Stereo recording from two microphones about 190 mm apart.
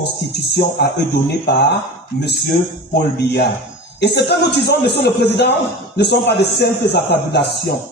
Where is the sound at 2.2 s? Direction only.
60° left (ahead or behind).